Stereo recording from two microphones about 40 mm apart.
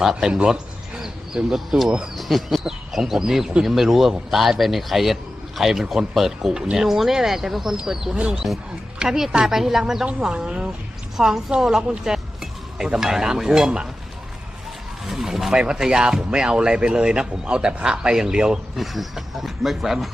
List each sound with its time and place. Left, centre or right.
0.0 s speech: centre
0.3 s a sound: right
1.5 s speech: centre
8.1 s speech: right
9.0 s a man's voice: centre
11.2 s speech: centre
15.0 s a man's voice: centre
18.8 s speech: centre